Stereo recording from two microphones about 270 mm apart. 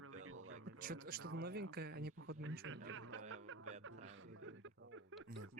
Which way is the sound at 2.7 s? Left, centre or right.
Right.